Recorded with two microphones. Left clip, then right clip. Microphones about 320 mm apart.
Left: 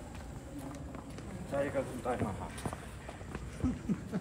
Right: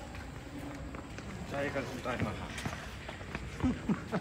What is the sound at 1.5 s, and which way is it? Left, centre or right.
Speech, left.